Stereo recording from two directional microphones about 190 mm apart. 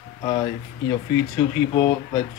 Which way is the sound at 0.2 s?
20° left (ahead or behind).